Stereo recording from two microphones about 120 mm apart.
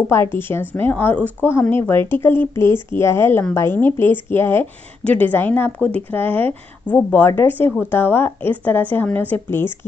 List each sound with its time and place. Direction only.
0.1 s speech: 20° left (ahead or behind)